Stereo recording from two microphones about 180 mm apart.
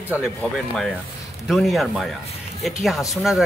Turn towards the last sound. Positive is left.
turn(degrees=0)  # may be behind; listen again after turning